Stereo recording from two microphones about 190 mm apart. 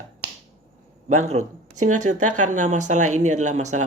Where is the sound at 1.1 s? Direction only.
35° right (ahead or behind).